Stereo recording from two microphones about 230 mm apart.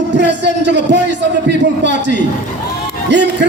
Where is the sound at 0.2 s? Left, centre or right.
Right.